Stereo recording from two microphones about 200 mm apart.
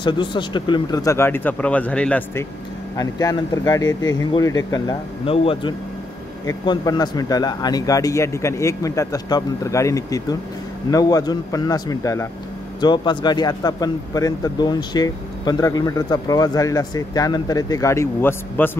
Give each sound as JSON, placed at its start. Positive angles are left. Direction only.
{"t": 0.0, "sound": "speech", "side_deg": 25}
{"t": 3.0, "sound": "speech", "side_deg": 20}